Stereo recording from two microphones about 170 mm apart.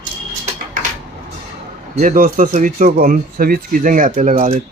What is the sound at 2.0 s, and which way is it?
Speech, 55° right (ahead or behind).